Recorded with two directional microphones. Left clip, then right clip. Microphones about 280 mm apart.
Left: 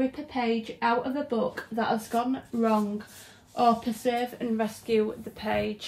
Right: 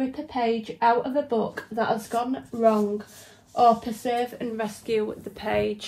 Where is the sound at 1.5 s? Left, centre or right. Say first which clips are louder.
Right 3 dB; right.